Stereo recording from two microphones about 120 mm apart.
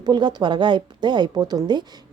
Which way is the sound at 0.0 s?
35° right (ahead or behind).